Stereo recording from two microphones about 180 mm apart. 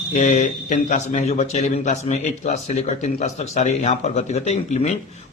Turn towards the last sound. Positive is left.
turn(degrees=40)  # may be behind; listen again after turning